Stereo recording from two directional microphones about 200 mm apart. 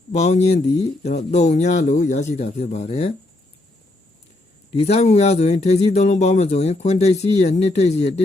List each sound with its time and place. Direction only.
0.1 s speech: 35° left (ahead or behind)
4.7 s speech: 30° left (ahead or behind)